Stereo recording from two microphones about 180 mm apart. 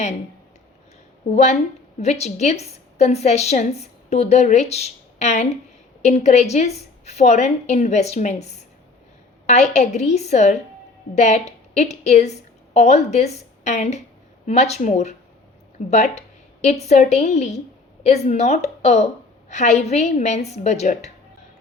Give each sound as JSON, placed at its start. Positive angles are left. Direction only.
{"t": 1.3, "sound": "a woman's voice", "side_deg": 40}